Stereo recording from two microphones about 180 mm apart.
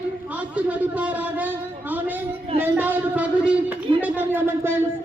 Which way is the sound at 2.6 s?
10° right (ahead or behind).